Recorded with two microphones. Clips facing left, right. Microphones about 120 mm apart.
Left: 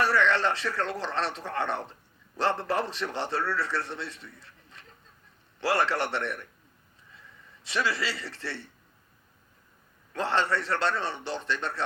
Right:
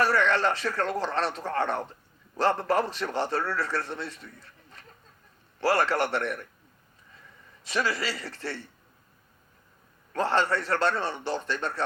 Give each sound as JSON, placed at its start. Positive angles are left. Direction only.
{"t": 0.0, "sound": "a man's voice", "side_deg": -45}
{"t": 7.7, "sound": "a man's voice", "side_deg": -45}
{"t": 10.1, "sound": "a man's voice", "side_deg": -45}